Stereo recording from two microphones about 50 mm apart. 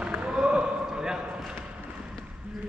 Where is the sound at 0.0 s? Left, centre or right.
Right.